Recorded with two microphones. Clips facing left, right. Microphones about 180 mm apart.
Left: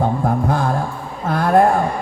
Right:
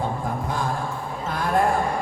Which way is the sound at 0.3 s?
65° left (ahead or behind).